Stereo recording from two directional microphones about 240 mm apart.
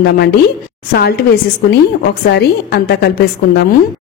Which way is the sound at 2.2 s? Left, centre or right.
Left.